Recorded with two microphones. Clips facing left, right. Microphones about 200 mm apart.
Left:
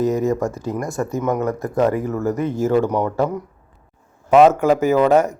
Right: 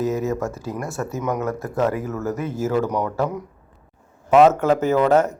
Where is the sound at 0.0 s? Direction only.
5° right (ahead or behind).